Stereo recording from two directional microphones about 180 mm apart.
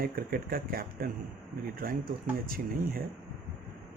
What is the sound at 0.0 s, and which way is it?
Speech, 55° right (ahead or behind).